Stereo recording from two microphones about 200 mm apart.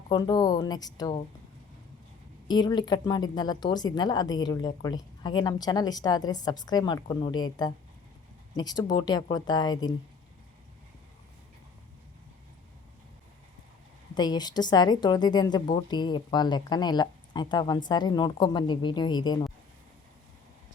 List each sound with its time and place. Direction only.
0.1 s speech: 20° left (ahead or behind)
2.5 s speech: 20° left (ahead or behind)
14.2 s speech: 20° left (ahead or behind)